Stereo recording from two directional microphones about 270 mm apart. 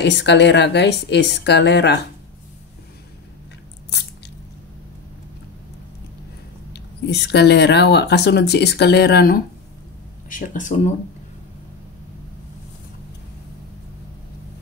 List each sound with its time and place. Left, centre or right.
0.0 s speech: left
6.7 s speech: left